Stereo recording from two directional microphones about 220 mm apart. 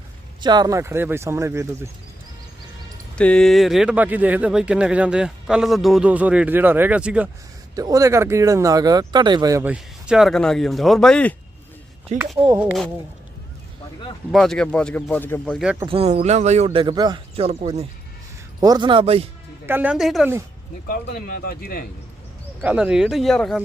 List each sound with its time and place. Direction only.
0.4 s speech: 20° right (ahead or behind)
3.2 s speech: 5° left (ahead or behind)
7.8 s speech: 15° right (ahead or behind)
14.3 s speech: centre (ahead or behind)
15.9 s speech: 30° right (ahead or behind)
19.6 s speech: 10° right (ahead or behind)
20.8 s speech: 40° left (ahead or behind)
22.6 s speech: 5° right (ahead or behind)